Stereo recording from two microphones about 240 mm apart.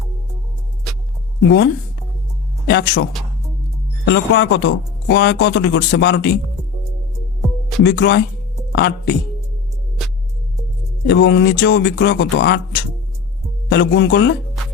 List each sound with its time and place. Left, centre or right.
1.5 s speech: left
7.9 s speech: left
11.0 s speech: left